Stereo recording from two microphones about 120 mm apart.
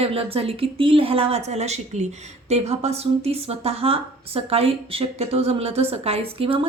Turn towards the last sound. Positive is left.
turn(degrees=-50)  # may be behind; listen again after turning